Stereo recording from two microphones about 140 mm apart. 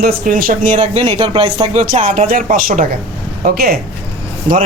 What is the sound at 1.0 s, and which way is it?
Speech, 40° right (ahead or behind).